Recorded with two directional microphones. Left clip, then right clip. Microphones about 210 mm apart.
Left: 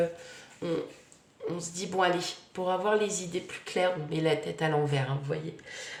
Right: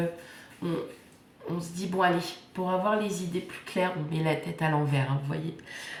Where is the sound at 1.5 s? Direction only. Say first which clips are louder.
Even; 40° left (ahead or behind).